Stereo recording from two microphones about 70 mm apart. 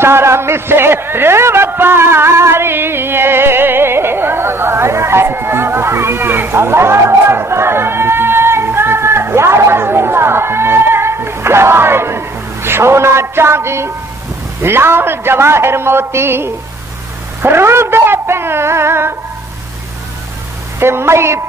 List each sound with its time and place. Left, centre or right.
0.0 s a sound: right
14.6 s a man's voice: right
20.8 s a man's voice: right